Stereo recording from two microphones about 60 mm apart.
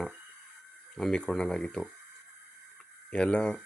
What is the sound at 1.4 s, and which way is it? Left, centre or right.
Speech, centre.